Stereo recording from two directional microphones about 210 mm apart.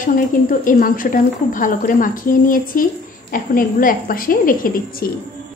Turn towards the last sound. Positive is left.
turn(degrees=45)  # may be behind; listen again after turning